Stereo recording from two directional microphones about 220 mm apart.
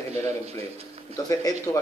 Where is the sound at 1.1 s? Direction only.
15° left (ahead or behind).